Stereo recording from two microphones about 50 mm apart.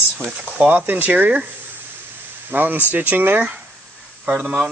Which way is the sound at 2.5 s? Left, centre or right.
Right.